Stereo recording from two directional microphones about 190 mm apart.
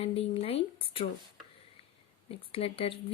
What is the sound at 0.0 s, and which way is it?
Speech, 30° left (ahead or behind).